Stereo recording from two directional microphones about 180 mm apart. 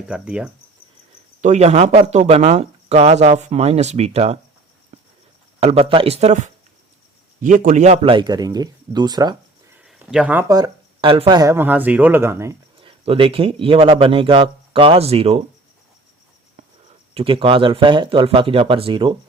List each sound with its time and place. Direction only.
0.1 s speech: 5° right (ahead or behind)
1.4 s speech: 40° right (ahead or behind)
5.5 s speech: 35° right (ahead or behind)
9.8 s a sound: 5° right (ahead or behind)
10.5 s speech: 25° right (ahead or behind)
12.8 s speech: 30° right (ahead or behind)
17.2 s speech: 30° right (ahead or behind)